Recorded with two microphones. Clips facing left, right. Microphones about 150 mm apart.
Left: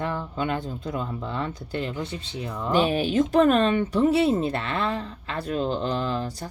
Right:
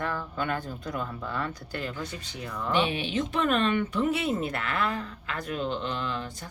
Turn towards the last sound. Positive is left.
turn(degrees=35)  # may be behind; listen again after turning